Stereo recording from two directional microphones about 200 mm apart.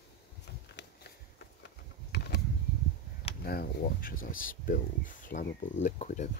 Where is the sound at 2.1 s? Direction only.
50° left (ahead or behind).